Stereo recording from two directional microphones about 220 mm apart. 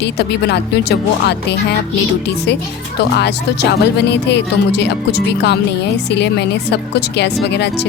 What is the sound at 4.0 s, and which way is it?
Speech, 50° left (ahead or behind).